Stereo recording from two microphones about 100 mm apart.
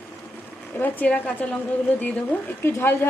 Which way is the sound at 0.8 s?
15° left (ahead or behind).